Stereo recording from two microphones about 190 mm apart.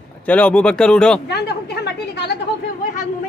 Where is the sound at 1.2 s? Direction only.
60° left (ahead or behind).